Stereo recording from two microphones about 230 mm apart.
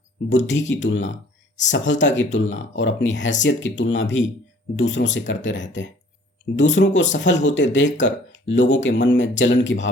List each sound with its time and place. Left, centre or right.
0.3 s speech: left